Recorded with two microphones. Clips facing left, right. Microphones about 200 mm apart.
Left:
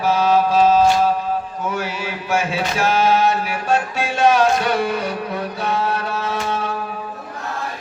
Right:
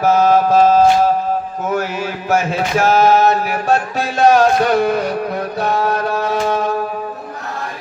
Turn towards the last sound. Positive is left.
turn(degrees=-45)  # may be behind; listen again after turning